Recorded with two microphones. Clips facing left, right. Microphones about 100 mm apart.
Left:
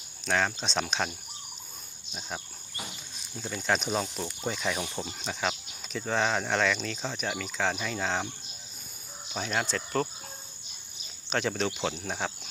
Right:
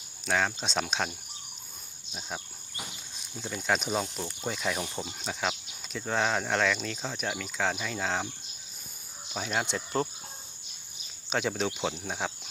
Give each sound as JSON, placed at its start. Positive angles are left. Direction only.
{"t": 0.3, "sound": "speech", "side_deg": -5}
{"t": 3.3, "sound": "speech", "side_deg": 0}
{"t": 9.3, "sound": "speech", "side_deg": -5}
{"t": 9.7, "sound": "cricket", "side_deg": -25}
{"t": 11.3, "sound": "speech", "side_deg": -5}